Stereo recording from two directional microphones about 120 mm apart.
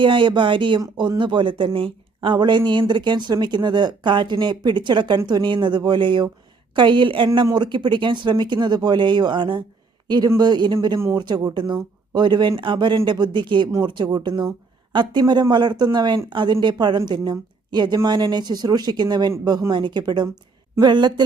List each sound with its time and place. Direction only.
0.0 s speech: 45° right (ahead or behind)